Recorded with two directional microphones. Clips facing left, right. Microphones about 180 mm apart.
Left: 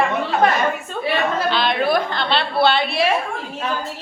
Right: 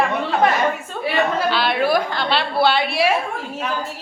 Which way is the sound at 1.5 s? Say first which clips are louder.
Even; 10° right (ahead or behind).